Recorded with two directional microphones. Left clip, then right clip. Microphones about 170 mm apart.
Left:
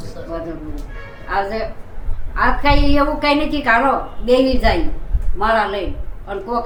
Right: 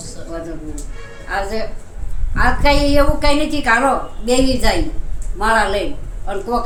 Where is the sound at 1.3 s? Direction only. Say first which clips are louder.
Left 2 dB; 25° right (ahead or behind).